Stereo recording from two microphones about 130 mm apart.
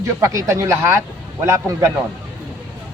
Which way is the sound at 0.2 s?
25° right (ahead or behind).